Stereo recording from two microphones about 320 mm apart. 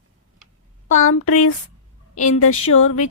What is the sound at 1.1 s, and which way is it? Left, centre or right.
Speech, left.